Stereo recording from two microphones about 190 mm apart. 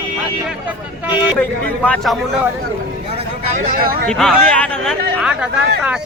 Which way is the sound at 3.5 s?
45° right (ahead or behind).